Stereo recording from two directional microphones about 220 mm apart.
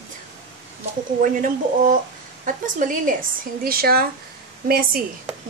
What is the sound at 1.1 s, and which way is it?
A woman's voice, 40° right (ahead or behind).